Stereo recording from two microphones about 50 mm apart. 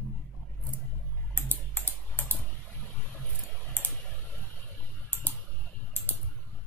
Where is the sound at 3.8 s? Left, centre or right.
Left.